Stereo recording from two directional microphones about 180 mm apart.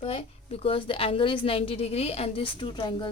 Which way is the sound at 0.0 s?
30° left (ahead or behind).